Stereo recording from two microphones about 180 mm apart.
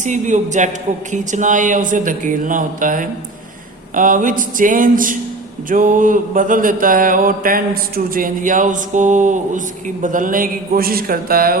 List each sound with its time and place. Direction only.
0.0 s mantra: 45° right (ahead or behind)